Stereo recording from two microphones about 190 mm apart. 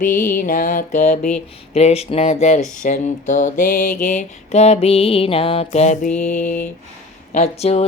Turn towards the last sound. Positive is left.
turn(degrees=35)  # may be behind; listen again after turning